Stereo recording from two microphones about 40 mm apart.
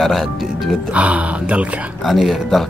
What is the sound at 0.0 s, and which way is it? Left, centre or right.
Speech, centre.